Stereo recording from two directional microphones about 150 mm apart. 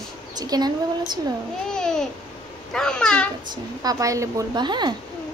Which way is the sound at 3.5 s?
25° right (ahead or behind).